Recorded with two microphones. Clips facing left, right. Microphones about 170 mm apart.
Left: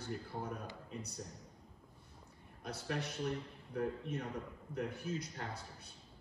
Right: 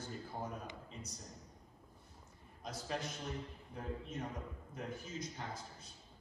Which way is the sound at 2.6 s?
60° left (ahead or behind).